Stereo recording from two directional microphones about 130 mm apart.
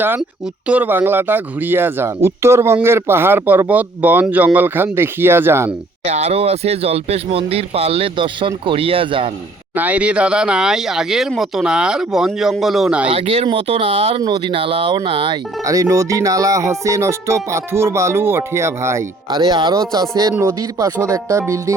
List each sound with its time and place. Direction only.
0.7 s speech: 15° right (ahead or behind)
6.1 s speech: 55° right (ahead or behind)
9.7 s speech: 10° right (ahead or behind)
13.1 s speech: 50° right (ahead or behind)
14.2 s speech: 40° right (ahead or behind)
15.6 s music: 25° right (ahead or behind)